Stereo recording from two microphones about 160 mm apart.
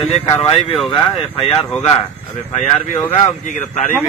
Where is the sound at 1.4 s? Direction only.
35° left (ahead or behind); by 3.9 s 50° left (ahead or behind).